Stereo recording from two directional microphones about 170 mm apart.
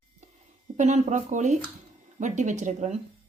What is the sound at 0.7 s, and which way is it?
A woman's voice, 45° right (ahead or behind).